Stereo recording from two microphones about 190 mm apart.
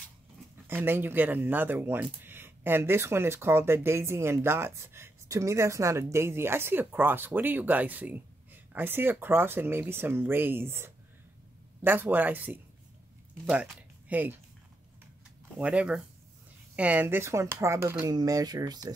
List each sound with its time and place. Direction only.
0.7 s speech: 10° right (ahead or behind)
15.6 s speech: 5° right (ahead or behind)